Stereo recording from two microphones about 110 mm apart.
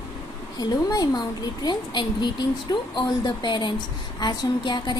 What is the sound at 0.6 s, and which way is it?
A woman's voice, 35° left (ahead or behind).